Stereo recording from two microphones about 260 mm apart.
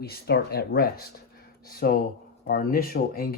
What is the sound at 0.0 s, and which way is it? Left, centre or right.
Speech, left.